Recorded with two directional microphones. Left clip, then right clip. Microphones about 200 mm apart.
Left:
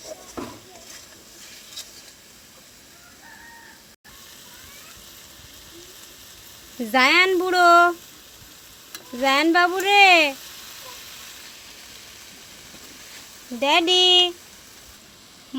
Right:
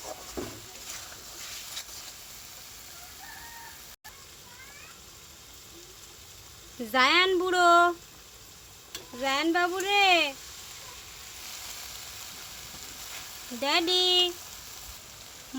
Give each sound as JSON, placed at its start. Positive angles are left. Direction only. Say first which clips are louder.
{"t": 6.9, "sound": "speech", "louder": "left 6 dB", "side_deg": 10}
{"t": 9.2, "sound": "speech", "louder": "left 9 dB", "side_deg": 20}
{"t": 13.6, "sound": "speech", "louder": "left 8 dB", "side_deg": 10}